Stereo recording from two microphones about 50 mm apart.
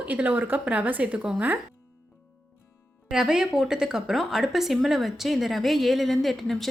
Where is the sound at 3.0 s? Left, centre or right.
Centre.